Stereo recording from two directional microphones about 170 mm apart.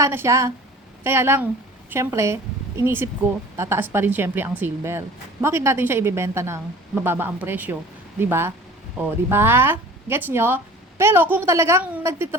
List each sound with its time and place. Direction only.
0.0 s a woman's voice: 15° right (ahead or behind)